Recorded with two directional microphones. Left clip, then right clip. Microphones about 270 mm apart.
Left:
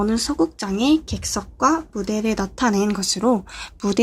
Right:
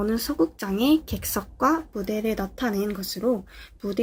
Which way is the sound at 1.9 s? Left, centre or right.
Centre.